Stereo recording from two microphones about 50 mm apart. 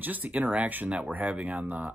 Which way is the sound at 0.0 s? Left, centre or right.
Right.